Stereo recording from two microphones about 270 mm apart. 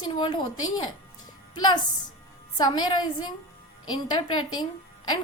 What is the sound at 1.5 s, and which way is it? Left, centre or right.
A woman's voice, centre.